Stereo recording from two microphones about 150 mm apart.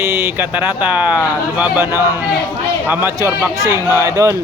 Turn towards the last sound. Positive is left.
turn(degrees=-20)  # may be behind; listen again after turning